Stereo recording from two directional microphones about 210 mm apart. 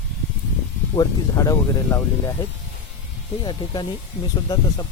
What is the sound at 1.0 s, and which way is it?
Speech, 15° left (ahead or behind).